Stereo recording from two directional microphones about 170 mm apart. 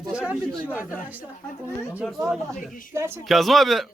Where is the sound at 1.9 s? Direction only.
5° right (ahead or behind).